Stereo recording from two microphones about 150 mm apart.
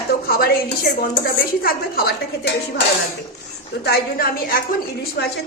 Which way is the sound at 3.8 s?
90° left.